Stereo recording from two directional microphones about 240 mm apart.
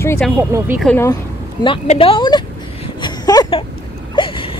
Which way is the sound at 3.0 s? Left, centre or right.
Centre.